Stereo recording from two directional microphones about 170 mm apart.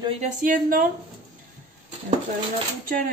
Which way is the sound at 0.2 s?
50° right (ahead or behind).